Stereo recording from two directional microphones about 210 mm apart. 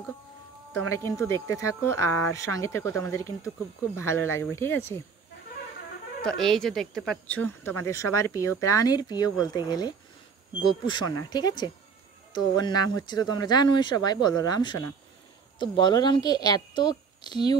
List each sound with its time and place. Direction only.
1.0 s speech: 15° left (ahead or behind)
6.2 s speech: centre (ahead or behind); by 17.6 s 20° left (ahead or behind)